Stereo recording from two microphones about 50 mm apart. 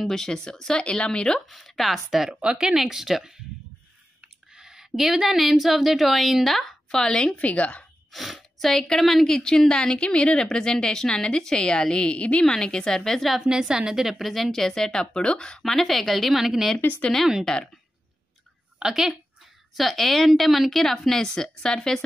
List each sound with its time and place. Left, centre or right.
0.1 s a woman's voice: centre
1.5 s a woman's voice: centre
2.4 s speech: centre
2.7 s speech: centre
4.6 s a woman's voice: centre
7.3 s a woman's voice: left
8.1 s a woman's voice: centre
13.5 s a woman's voice: centre
17.5 s a woman's voice: centre
18.8 s a woman's voice: centre
19.7 s a woman's voice: centre